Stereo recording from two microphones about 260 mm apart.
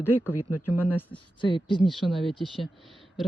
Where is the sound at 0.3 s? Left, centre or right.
Left.